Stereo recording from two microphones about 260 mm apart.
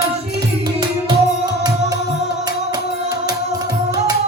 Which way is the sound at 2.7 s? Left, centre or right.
Centre.